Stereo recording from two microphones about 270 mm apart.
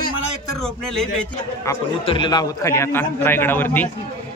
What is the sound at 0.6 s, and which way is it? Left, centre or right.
A man's voice, centre.